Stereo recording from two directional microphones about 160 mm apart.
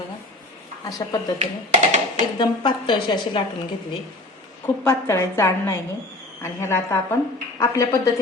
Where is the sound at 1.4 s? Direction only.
45° right (ahead or behind).